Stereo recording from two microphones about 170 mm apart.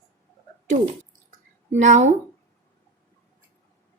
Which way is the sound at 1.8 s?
45° right (ahead or behind).